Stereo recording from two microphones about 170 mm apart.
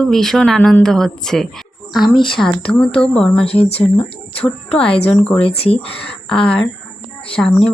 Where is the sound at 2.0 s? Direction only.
30° left (ahead or behind).